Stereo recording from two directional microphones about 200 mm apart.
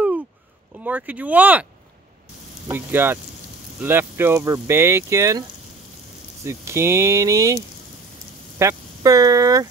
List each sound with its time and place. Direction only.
0.8 s speech: 10° right (ahead or behind)
2.7 s speech: 10° right (ahead or behind)
6.4 s speech: 15° right (ahead or behind)